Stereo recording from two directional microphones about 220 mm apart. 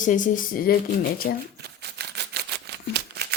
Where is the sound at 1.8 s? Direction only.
50° right (ahead or behind).